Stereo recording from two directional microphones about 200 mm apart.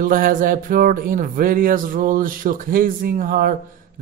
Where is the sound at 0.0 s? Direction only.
45° right (ahead or behind).